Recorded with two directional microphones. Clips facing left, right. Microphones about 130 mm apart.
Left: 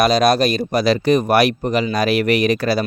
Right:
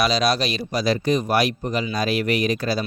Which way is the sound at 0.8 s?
70° left (ahead or behind).